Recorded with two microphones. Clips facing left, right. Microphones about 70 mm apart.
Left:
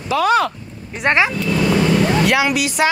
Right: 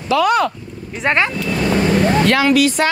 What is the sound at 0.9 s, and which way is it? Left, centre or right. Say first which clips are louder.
Speech: left 1 dB; centre.